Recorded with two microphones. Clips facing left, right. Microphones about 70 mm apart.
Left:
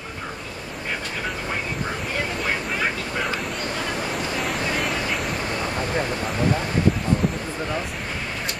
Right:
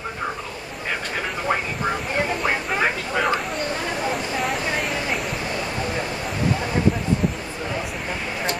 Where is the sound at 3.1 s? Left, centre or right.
Right.